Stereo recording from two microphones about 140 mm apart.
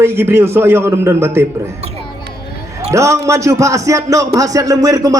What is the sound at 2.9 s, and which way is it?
A man's voice, 20° right (ahead or behind).